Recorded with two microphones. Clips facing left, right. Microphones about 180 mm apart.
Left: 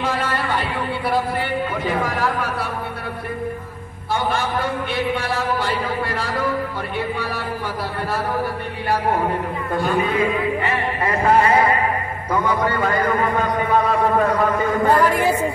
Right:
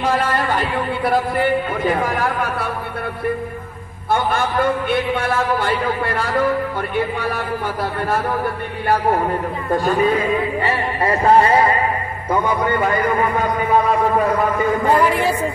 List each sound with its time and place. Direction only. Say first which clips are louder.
0.0 s a sound: right 4 dB; 45° right (ahead or behind)
1.0 s a man's voice: right 5 dB; 45° right (ahead or behind)
4.1 s a man's voice: right 3 dB; 55° right (ahead or behind)
9.7 s a man's voice: right 4 dB; 40° right (ahead or behind); by 12.9 s 25° right (ahead or behind)
14.9 s a man's voice: even; 10° right (ahead or behind)